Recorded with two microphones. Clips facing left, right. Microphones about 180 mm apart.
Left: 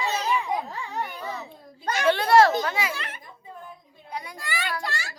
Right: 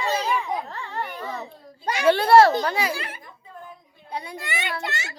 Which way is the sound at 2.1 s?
30° right (ahead or behind).